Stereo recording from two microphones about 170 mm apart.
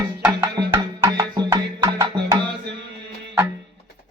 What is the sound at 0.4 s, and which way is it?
Music, 25° right (ahead or behind).